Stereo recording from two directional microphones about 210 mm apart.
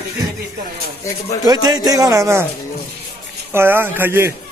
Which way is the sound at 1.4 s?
20° right (ahead or behind).